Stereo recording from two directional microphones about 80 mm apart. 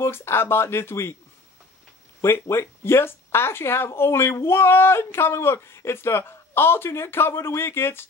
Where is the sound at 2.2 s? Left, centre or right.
Left.